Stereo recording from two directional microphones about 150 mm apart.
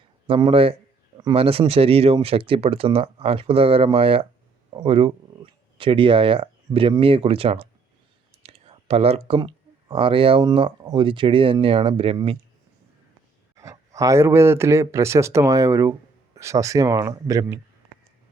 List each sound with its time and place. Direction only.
0.3 s speech: 35° right (ahead or behind)
8.4 s whispering: 40° right (ahead or behind)
9.5 s speech: 35° right (ahead or behind)
13.6 s speech: 20° right (ahead or behind)